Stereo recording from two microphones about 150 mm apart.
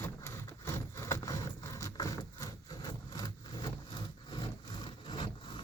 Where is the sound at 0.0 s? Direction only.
15° left (ahead or behind).